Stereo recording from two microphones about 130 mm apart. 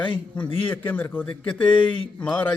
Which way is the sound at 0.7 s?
15° left (ahead or behind).